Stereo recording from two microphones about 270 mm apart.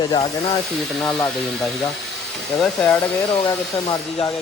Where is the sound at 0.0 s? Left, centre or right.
Centre.